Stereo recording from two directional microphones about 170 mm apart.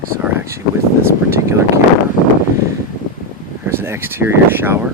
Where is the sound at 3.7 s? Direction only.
15° right (ahead or behind).